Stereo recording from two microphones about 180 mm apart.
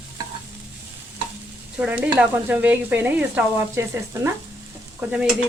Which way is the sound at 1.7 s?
5° right (ahead or behind).